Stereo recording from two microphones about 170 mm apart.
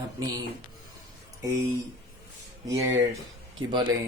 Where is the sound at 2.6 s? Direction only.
20° right (ahead or behind).